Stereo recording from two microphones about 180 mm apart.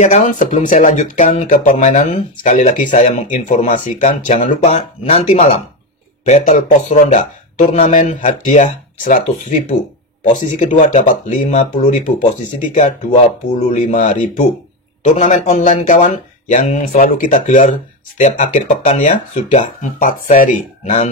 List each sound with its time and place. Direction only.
0.0 s speech: 45° left (ahead or behind)